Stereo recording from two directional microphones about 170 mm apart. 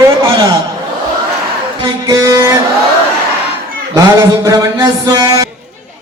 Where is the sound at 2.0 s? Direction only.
15° right (ahead or behind).